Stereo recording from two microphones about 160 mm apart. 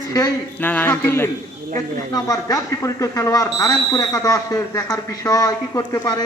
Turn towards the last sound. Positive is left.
turn(degrees=25)  # may be behind; listen again after turning